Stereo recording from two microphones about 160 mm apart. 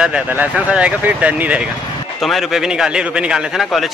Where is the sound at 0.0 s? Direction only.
10° right (ahead or behind).